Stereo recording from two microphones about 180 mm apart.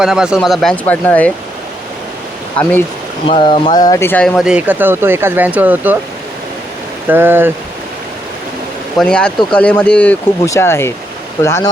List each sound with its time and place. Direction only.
0.0 s speech: 5° right (ahead or behind)
2.6 s speech: 5° left (ahead or behind)
3.2 s speech: 30° left (ahead or behind); by 4.3 s 10° left (ahead or behind)
4.4 s speech: 5° right (ahead or behind)
7.1 s speech: 10° right (ahead or behind)
9.0 s speech: 5° left (ahead or behind)